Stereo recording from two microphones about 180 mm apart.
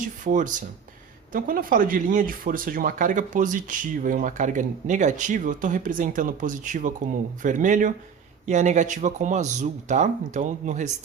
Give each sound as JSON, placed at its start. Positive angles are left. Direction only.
{"t": 0.3, "sound": "speech", "side_deg": -45}